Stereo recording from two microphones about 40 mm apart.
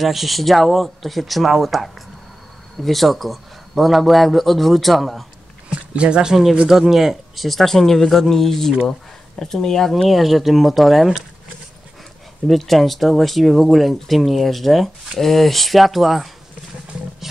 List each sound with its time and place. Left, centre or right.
0.0 s a man's voice: centre
5.7 s speech: right
6.7 s speech: centre
7.4 s speech: centre
10.0 s a man's voice: centre
12.4 s a man's voice: centre